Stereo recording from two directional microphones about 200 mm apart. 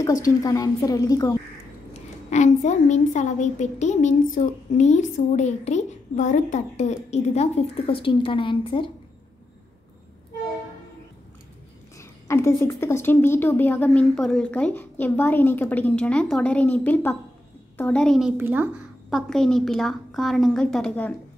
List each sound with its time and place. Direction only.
0.0 s a woman's voice: 15° left (ahead or behind)
2.0 s a woman's voice: 35° left (ahead or behind)
12.0 s a woman's voice: 15° left (ahead or behind)
18.4 s a woman's voice: 10° right (ahead or behind)